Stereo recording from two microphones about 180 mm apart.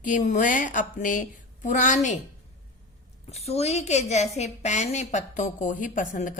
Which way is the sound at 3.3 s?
35° left (ahead or behind).